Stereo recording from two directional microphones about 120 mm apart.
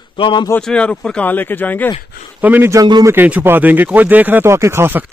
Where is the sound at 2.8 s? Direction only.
35° right (ahead or behind).